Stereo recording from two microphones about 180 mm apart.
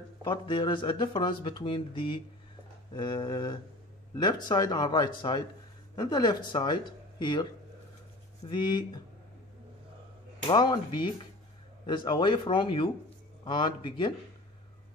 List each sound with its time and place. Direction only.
0.2 s speech: 25° left (ahead or behind)
8.5 s speech: 25° left (ahead or behind)
10.4 s speech: 25° left (ahead or behind)